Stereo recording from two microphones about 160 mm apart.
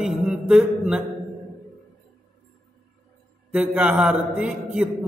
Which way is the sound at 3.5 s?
10° right (ahead or behind).